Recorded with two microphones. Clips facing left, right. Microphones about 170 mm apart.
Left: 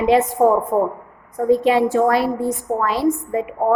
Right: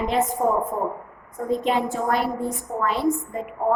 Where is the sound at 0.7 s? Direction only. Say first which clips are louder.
Left 8 dB; 90° left.